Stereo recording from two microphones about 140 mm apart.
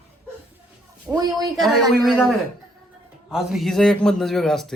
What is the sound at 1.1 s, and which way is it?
Speech, 25° right (ahead or behind).